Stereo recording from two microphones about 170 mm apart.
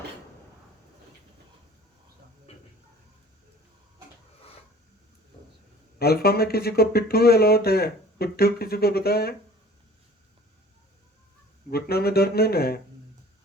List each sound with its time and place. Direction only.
2.5 s a sound: 40° left (ahead or behind)
6.0 s speech: 65° left (ahead or behind)
11.7 s speech: 65° left (ahead or behind)